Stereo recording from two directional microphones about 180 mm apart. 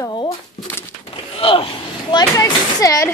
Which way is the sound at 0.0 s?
25° left (ahead or behind).